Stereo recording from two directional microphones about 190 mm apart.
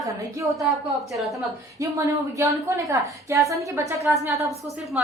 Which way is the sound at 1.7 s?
15° right (ahead or behind).